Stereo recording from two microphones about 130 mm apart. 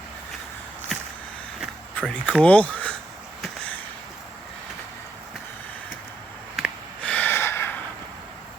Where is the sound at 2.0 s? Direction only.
5° left (ahead or behind).